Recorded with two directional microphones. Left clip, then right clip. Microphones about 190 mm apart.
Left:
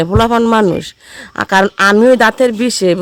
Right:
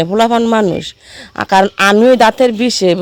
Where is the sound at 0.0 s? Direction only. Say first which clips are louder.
Even; 15° left (ahead or behind).